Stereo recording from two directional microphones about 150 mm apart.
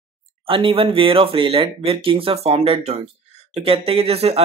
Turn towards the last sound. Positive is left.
turn(degrees=-45)  # may be behind; listen again after turning